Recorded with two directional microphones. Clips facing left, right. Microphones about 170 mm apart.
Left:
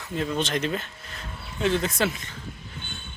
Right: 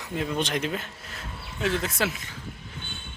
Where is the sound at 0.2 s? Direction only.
10° right (ahead or behind).